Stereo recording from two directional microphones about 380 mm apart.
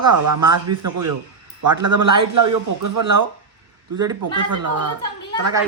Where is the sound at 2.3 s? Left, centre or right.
Right.